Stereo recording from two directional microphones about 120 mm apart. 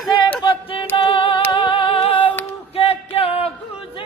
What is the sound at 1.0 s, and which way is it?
Female singing, 45° left (ahead or behind).